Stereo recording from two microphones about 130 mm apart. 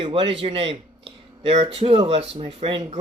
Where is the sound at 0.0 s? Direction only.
40° right (ahead or behind).